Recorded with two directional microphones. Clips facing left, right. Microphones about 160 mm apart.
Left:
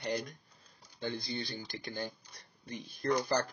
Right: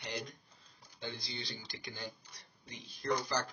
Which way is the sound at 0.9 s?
50° left (ahead or behind).